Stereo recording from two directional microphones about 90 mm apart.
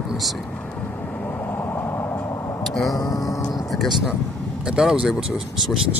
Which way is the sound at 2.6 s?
Centre (ahead or behind).